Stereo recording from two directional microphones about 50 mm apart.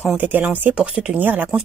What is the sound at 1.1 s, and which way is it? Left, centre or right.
Speech, right.